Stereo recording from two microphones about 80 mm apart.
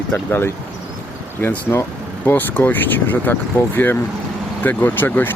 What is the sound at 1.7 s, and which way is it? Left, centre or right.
Speech, left.